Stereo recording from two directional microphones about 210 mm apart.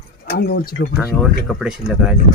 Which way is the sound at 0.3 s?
45° left (ahead or behind).